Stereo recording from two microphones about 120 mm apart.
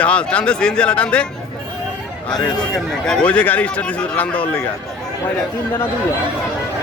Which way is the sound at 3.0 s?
5° left (ahead or behind).